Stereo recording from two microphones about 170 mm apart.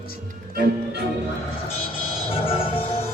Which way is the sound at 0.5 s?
60° right (ahead or behind).